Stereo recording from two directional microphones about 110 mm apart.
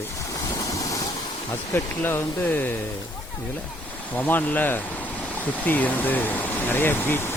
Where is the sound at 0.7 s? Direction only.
30° left (ahead or behind).